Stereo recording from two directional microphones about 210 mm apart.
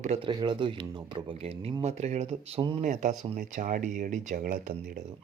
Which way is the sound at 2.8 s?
35° right (ahead or behind).